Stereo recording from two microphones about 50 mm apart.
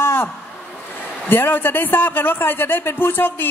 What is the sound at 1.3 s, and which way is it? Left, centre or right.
A woman's voice, left.